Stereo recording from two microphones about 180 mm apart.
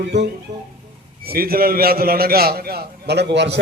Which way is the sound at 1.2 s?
55° right (ahead or behind).